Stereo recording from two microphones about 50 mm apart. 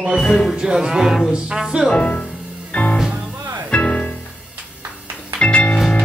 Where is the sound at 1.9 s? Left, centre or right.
Left.